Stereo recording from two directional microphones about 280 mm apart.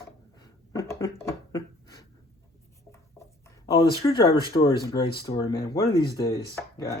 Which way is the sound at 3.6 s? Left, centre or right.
Centre.